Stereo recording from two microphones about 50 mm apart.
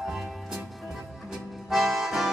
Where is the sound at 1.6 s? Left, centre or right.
Centre.